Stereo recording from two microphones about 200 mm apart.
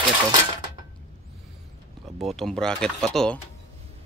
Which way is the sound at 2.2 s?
Centre (ahead or behind).